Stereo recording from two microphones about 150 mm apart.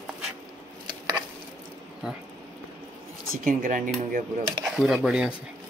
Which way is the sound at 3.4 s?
65° right (ahead or behind).